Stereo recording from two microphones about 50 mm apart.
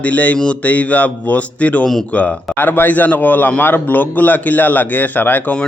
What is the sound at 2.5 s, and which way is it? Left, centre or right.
A man's voice, left.